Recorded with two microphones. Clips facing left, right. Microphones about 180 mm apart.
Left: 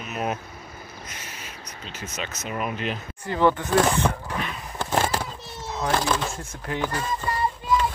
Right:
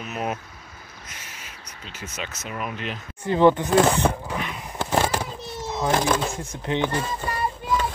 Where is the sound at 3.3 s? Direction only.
20° right (ahead or behind).